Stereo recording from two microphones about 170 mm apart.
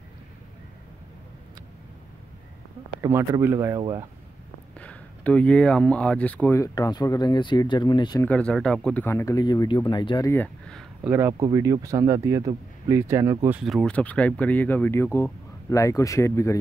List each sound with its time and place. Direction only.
3.0 s speech: 15° right (ahead or behind)
4.7 s speech: 5° left (ahead or behind); by 8.3 s 25° left (ahead or behind)
8.3 s speech: 5° left (ahead or behind); by 10.3 s 25° left (ahead or behind)
10.3 s a sound: 5° left (ahead or behind)
11.1 s speech: 15° right (ahead or behind)
13.6 s speech: centre (ahead or behind); by 16.5 s 15° left (ahead or behind)